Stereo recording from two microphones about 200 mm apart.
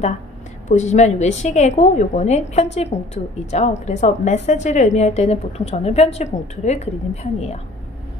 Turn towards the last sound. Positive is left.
turn(degrees=35)  # may be behind; listen again after turning